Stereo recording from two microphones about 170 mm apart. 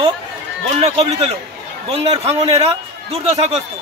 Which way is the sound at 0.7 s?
40° right (ahead or behind).